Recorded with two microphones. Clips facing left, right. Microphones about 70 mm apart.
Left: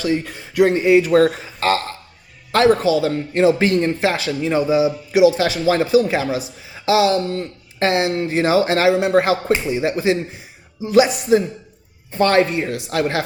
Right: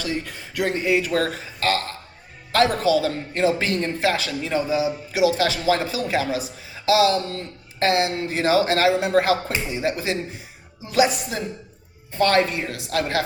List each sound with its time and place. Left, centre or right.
0.0 s a man's voice: left